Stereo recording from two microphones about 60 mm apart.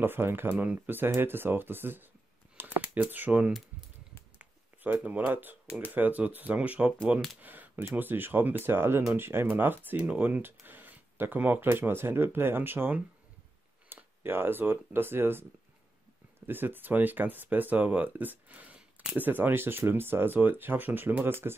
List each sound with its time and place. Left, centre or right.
0.0 s speech: right
0.5 s speech: right
5.0 s speech: right
7.4 s a sound: right
7.9 s speech: right
13.9 s a sound: right
14.2 s speech: right